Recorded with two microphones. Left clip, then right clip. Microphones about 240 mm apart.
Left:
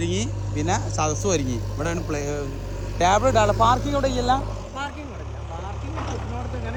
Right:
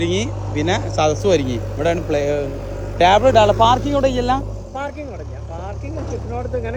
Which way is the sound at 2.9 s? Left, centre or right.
Right.